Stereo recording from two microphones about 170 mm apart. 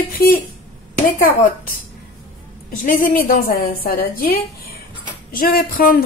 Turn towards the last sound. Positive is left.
turn(degrees=60)  # may be behind; listen again after turning